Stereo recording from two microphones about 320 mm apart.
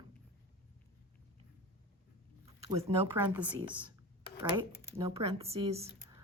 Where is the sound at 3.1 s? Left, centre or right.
Centre.